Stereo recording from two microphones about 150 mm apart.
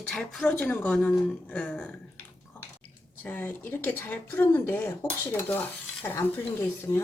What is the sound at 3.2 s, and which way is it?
Speech, 15° left (ahead or behind).